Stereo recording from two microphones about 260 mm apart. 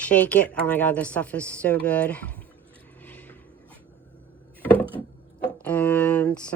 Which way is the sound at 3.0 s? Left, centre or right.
Centre.